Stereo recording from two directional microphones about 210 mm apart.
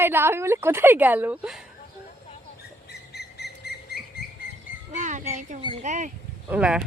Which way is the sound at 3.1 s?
50° left (ahead or behind).